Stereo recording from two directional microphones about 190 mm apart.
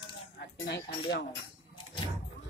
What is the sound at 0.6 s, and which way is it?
Dishes, 65° left (ahead or behind).